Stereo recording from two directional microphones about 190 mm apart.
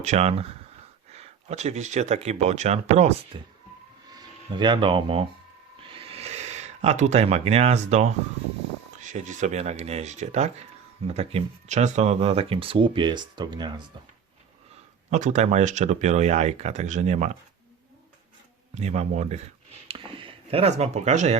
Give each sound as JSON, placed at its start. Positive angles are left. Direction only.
{"t": 0.0, "sound": "speech", "side_deg": -35}
{"t": 5.9, "sound": "a sound", "side_deg": -30}
{"t": 9.0, "sound": "speech", "side_deg": -40}
{"t": 15.1, "sound": "speech", "side_deg": -40}
{"t": 18.7, "sound": "speech", "side_deg": -35}
{"t": 19.9, "sound": "a sound", "side_deg": -25}